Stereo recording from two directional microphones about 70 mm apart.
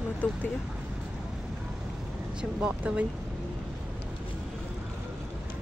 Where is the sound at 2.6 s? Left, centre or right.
Centre.